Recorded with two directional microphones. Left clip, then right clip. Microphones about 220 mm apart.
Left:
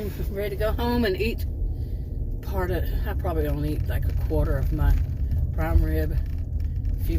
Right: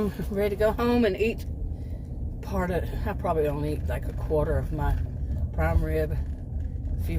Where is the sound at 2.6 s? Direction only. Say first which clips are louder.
Even; 20° right (ahead or behind).